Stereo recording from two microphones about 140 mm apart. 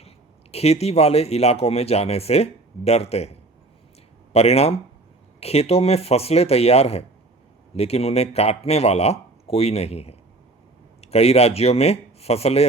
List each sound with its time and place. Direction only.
0.5 s speech: 50° left (ahead or behind)